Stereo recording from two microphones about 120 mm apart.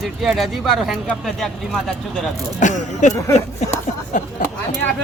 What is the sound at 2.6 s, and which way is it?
Speech, 90° left.